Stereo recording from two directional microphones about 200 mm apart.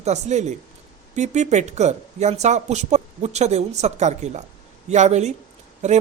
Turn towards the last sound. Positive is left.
turn(degrees=-35)  # may be behind; listen again after turning